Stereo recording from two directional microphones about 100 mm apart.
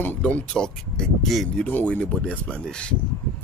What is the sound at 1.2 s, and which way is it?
Speech, 5° left (ahead or behind).